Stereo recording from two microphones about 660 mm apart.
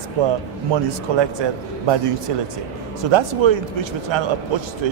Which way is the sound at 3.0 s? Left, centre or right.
Right.